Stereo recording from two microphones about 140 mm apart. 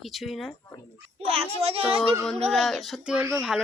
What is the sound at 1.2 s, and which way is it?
Speech, 45° right (ahead or behind).